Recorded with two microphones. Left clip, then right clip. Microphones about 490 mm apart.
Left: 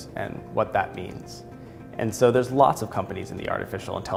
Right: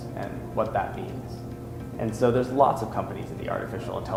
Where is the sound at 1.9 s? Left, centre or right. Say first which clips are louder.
Left 3 dB; left.